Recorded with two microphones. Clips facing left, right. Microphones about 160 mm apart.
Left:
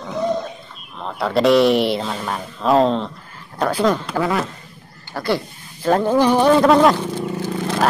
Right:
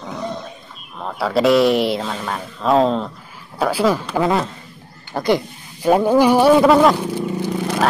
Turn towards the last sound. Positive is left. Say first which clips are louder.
# right 1 dB
turn(degrees=-10)  # may be behind; listen again after turning